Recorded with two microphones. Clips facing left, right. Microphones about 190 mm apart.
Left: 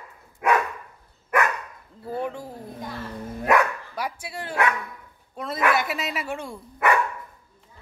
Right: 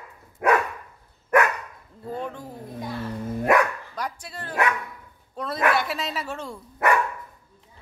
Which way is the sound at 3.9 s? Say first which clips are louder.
Left 2 dB; 10° left (ahead or behind).